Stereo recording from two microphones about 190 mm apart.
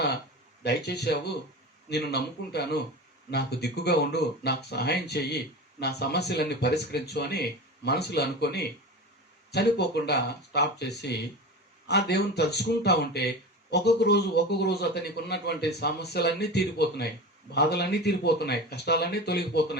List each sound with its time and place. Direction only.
0.6 s speech: 60° left (ahead or behind)